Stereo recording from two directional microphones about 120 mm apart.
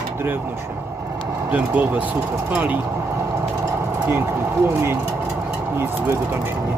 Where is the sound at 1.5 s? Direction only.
15° right (ahead or behind).